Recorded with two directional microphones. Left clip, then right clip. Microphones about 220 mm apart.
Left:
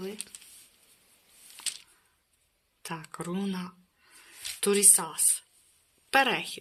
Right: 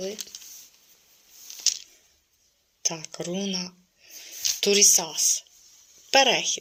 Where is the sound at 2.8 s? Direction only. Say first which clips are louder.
Right 7 dB; 65° left (ahead or behind).